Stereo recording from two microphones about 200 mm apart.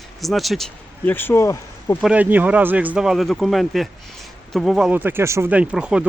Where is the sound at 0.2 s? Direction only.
Centre (ahead or behind).